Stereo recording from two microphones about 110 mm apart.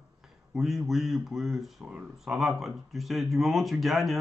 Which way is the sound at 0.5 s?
Centre (ahead or behind).